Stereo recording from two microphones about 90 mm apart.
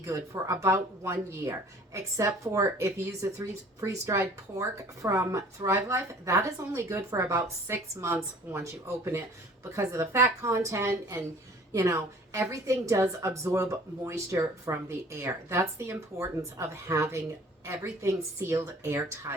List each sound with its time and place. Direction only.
0.0 s a woman's voice: 35° right (ahead or behind)